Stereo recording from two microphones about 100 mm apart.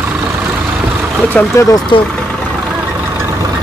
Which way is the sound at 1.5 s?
40° left (ahead or behind).